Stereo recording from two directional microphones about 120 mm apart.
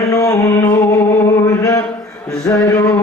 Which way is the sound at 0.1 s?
25° left (ahead or behind).